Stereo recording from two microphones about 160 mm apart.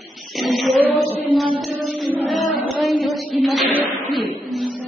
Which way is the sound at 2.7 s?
Centre (ahead or behind).